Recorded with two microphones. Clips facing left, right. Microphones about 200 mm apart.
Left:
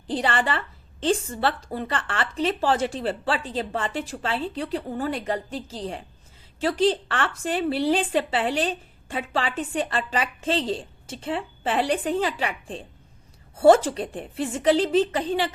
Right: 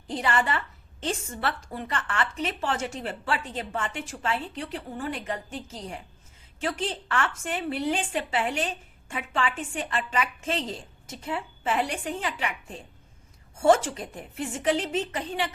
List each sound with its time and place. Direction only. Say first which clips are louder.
0.1 s a woman's voice: left 2 dB; 30° left (ahead or behind)